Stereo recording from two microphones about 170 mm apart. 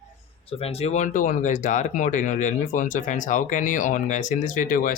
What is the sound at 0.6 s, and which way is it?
Speech, 40° left (ahead or behind).